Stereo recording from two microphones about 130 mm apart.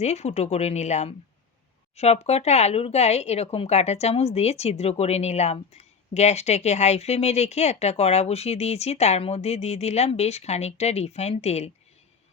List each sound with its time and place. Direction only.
0.0 s speech: 55° left (ahead or behind)